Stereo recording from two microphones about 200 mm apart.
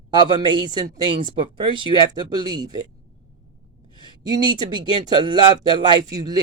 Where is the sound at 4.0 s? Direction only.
20° right (ahead or behind).